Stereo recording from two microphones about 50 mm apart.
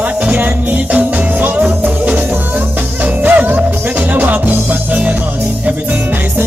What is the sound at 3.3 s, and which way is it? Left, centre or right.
Music, right.